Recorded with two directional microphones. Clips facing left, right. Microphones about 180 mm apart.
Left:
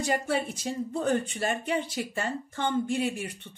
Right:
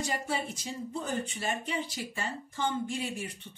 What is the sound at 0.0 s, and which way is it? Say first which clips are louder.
Speech: left 5 dB; 55° left (ahead or behind).